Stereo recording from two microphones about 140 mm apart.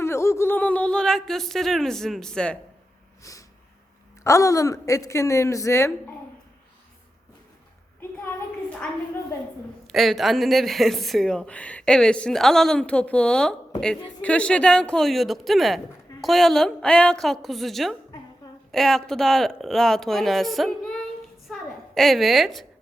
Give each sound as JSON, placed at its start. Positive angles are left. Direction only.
{"t": 0.0, "sound": "speech", "side_deg": 20}
{"t": 3.3, "sound": "a woman's voice", "side_deg": 25}
{"t": 9.8, "sound": "speech", "side_deg": 0}
{"t": 21.4, "sound": "a sound", "side_deg": 0}